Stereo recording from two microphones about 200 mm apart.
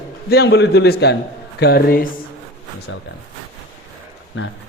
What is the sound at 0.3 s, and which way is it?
A man's voice, 55° left (ahead or behind).